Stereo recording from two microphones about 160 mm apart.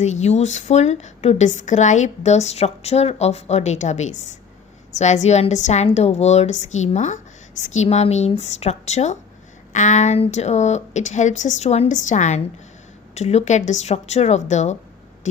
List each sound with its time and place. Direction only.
0.0 s a woman's voice: 45° left (ahead or behind)